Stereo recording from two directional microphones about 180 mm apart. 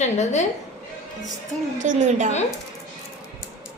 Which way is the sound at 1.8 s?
45° right (ahead or behind).